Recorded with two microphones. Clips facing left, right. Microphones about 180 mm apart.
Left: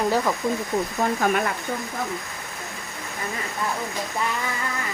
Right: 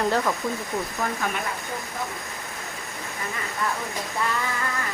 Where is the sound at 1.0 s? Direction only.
25° left (ahead or behind).